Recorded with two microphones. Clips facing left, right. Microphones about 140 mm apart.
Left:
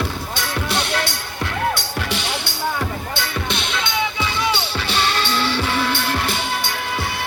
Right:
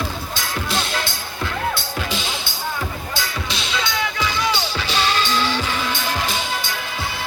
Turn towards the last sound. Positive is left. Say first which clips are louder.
# left 1 dB
turn(degrees=60)  # may be behind; listen again after turning